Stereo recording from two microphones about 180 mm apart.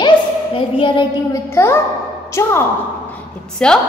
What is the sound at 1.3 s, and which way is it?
Speech, 15° left (ahead or behind).